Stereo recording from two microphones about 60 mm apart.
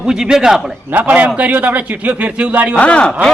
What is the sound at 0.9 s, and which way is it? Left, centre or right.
A man's voice, right.